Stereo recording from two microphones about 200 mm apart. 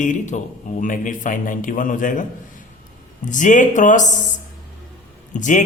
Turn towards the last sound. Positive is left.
turn(degrees=40)  # may be behind; listen again after turning